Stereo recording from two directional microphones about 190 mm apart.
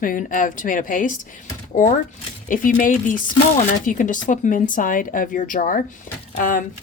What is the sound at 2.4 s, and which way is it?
Speech, 45° left (ahead or behind).